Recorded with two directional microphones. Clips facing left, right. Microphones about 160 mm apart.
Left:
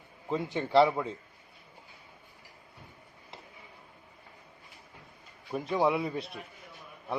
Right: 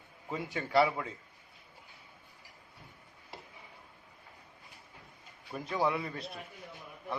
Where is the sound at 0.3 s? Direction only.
25° left (ahead or behind).